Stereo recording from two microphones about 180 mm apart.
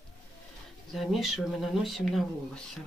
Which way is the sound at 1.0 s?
Centre (ahead or behind).